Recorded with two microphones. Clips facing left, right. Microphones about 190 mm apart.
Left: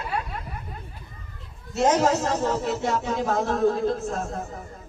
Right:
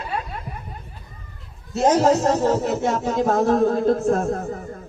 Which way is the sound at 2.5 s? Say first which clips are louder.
Right 4 dB; 50° right (ahead or behind).